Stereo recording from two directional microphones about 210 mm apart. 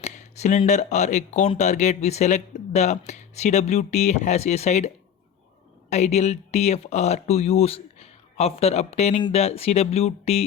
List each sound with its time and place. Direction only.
0.0 s speech: 35° left (ahead or behind)
5.9 s speech: 30° left (ahead or behind)